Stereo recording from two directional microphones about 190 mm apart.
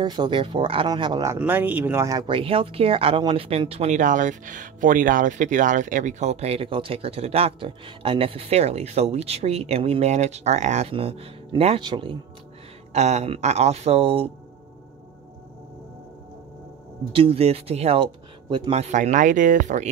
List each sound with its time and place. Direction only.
0.0 s speech: 25° right (ahead or behind)
12.9 s speech: 35° right (ahead or behind)
17.1 s speech: 30° right (ahead or behind)